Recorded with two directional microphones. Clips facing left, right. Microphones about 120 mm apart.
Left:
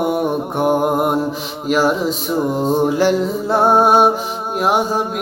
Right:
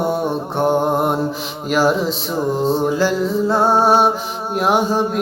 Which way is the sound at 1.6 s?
Centre (ahead or behind).